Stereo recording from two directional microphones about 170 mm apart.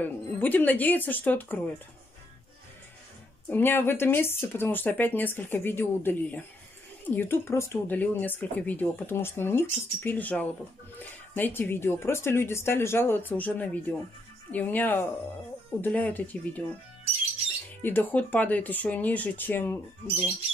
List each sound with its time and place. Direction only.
0.0 s speech: 10° left (ahead or behind)
3.4 s speech: 10° left (ahead or behind)
17.8 s speech: 10° left (ahead or behind)